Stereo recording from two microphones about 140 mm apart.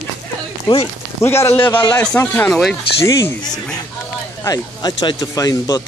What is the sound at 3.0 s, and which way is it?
Speech, 25° left (ahead or behind).